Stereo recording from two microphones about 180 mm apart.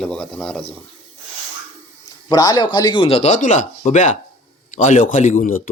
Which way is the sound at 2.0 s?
20° left (ahead or behind).